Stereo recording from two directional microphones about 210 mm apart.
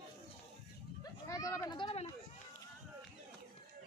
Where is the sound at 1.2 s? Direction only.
15° left (ahead or behind).